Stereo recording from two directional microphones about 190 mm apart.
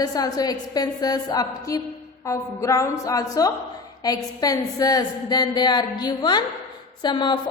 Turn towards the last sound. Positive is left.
turn(degrees=25)  # may be behind; listen again after turning